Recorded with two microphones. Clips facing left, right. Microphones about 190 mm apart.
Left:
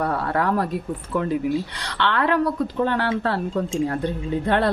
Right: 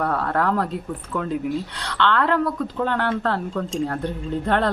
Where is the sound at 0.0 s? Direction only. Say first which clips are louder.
Even; 15° left (ahead or behind).